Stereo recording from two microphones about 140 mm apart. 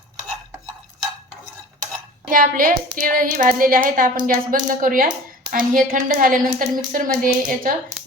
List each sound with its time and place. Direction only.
2.3 s a woman's voice: 80° right